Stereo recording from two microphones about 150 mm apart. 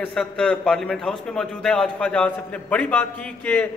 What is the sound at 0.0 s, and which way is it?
A man's voice, 5° left (ahead or behind).